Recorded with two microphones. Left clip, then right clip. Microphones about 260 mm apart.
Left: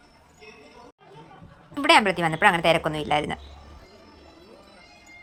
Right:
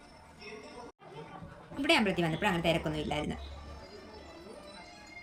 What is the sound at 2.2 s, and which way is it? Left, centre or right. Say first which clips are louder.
Speech: left 11 dB; left.